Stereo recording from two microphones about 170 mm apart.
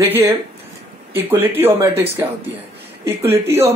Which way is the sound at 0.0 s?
15° right (ahead or behind).